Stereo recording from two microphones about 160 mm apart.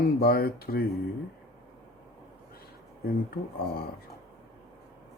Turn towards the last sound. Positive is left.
turn(degrees=70)  # may be behind; listen again after turning